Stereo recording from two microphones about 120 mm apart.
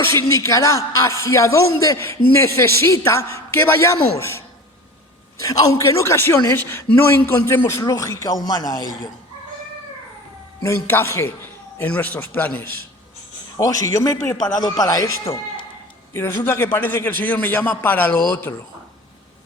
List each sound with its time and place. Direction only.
0.1 s a man's voice: 25° left (ahead or behind)
10.6 s a man's voice: 20° left (ahead or behind)
13.6 s a man's voice: 30° left (ahead or behind)
16.4 s a man's voice: 20° left (ahead or behind)